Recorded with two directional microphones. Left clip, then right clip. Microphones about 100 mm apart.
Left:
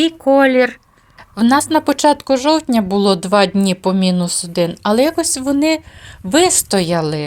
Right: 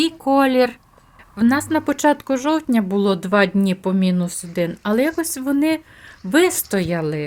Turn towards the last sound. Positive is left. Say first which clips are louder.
# left 5 dB
turn(degrees=20)  # may be behind; listen again after turning